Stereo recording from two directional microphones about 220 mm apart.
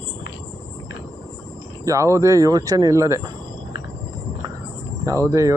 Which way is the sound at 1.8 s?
15° right (ahead or behind).